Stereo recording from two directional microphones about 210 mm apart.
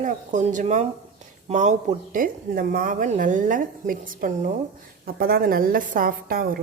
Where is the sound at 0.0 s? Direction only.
35° right (ahead or behind).